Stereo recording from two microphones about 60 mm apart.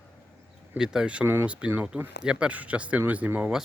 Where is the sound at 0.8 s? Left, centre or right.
Centre.